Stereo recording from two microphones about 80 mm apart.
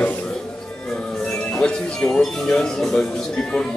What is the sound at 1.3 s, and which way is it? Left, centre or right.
Speech, centre.